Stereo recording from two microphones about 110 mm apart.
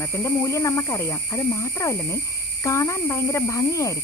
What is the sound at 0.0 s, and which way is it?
Speech, 25° left (ahead or behind).